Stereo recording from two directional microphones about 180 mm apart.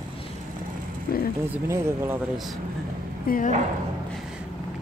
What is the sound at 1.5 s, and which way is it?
Speech, 15° right (ahead or behind).